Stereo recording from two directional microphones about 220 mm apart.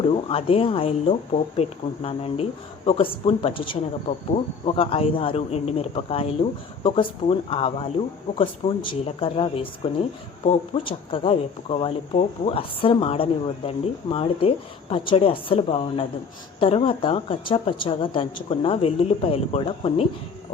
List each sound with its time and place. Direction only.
0.1 s speech: 25° left (ahead or behind)